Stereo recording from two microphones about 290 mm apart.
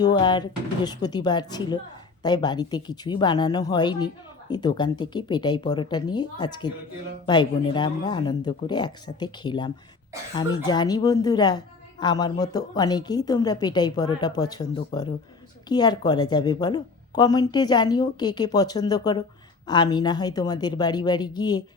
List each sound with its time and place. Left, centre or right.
0.0 s a woman's voice: centre